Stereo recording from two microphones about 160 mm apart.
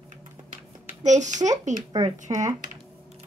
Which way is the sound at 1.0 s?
50° right (ahead or behind).